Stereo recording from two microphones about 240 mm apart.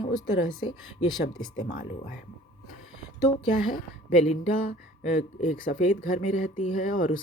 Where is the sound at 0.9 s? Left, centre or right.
Centre.